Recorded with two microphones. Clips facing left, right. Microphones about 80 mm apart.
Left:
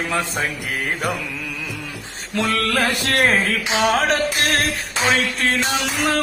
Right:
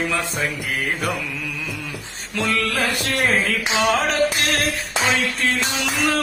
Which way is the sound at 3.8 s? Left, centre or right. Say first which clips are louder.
Left 1 dB; left.